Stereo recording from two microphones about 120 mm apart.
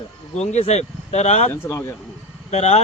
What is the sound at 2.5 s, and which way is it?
Speech, 65° left (ahead or behind).